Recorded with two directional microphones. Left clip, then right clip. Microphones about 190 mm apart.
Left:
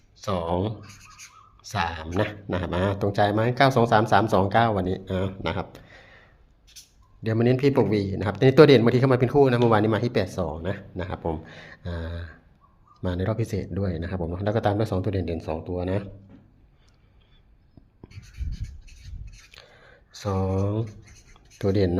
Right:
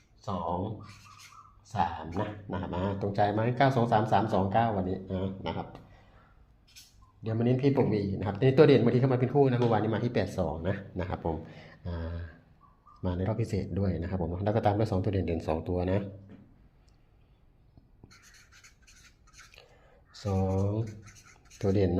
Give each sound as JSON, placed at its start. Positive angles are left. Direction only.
{"t": 0.2, "sound": "speech", "side_deg": 55}
{"t": 3.2, "sound": "speech", "side_deg": 20}
{"t": 7.3, "sound": "speech", "side_deg": 40}
{"t": 19.5, "sound": "a sound", "side_deg": 15}
{"t": 21.6, "sound": "speech", "side_deg": 15}